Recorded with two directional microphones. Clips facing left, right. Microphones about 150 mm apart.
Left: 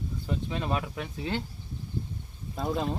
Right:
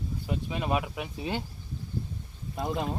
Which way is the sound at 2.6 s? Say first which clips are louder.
Left 1 dB; centre (ahead or behind).